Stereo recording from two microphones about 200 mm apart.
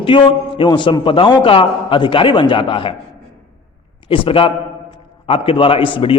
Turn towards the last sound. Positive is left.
turn(degrees=25)  # may be behind; listen again after turning